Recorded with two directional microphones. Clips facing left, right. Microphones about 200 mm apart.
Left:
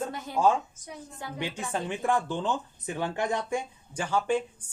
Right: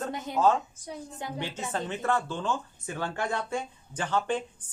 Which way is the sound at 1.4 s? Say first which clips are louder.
Left 2 dB; 15° left (ahead or behind).